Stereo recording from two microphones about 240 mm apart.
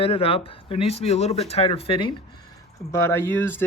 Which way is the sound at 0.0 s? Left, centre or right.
Left.